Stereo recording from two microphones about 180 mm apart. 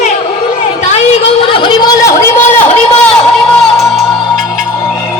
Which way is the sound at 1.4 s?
30° left (ahead or behind).